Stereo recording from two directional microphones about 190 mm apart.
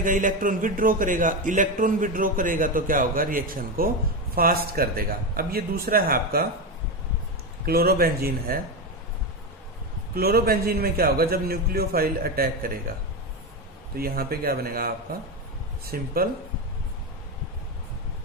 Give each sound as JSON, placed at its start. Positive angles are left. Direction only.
{"t": 0.0, "sound": "a man's voice", "side_deg": -45}
{"t": 7.6, "sound": "a man's voice", "side_deg": -55}
{"t": 10.2, "sound": "a man's voice", "side_deg": -55}
{"t": 13.9, "sound": "a man's voice", "side_deg": -50}
{"t": 15.9, "sound": "a man's voice", "side_deg": -50}